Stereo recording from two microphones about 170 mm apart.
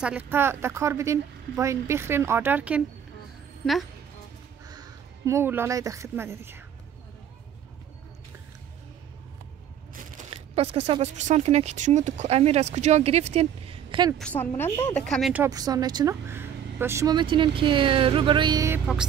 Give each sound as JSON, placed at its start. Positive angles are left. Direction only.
{"t": 0.0, "sound": "speech", "side_deg": -10}
{"t": 4.6, "sound": "speech", "side_deg": -25}
{"t": 10.3, "sound": "speech", "side_deg": -35}
{"t": 14.1, "sound": "a woman's voice", "side_deg": 5}
{"t": 15.3, "sound": "a woman's voice", "side_deg": -20}